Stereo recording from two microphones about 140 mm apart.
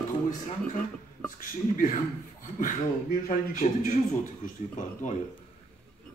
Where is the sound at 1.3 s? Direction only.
75° left (ahead or behind).